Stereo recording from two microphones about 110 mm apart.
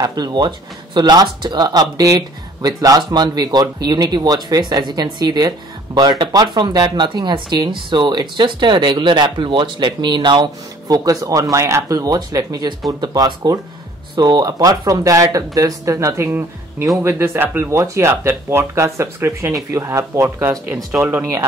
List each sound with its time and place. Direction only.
0.0 s speech: 35° right (ahead or behind)